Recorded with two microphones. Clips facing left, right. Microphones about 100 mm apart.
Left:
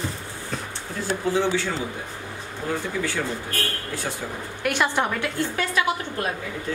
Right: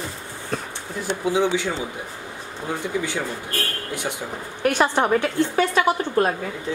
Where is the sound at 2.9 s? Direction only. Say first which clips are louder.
Right 4 dB; 20° right (ahead or behind).